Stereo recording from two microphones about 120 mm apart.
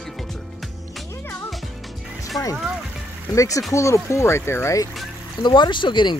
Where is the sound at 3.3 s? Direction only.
25° left (ahead or behind).